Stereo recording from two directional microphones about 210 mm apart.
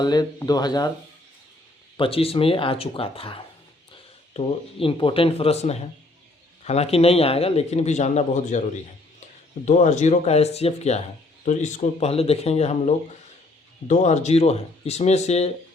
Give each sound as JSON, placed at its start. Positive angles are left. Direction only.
{"t": 0.0, "sound": "speech", "side_deg": 20}
{"t": 2.0, "sound": "speech", "side_deg": 25}
{"t": 9.6, "sound": "speech", "side_deg": 35}